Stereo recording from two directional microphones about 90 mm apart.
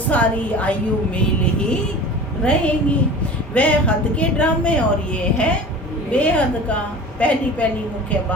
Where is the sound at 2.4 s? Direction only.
10° left (ahead or behind).